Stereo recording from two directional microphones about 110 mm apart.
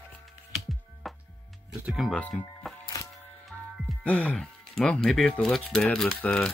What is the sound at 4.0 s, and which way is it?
Speech, 15° left (ahead or behind).